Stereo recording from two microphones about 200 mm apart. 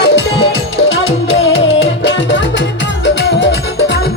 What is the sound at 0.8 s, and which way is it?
Music, 30° left (ahead or behind).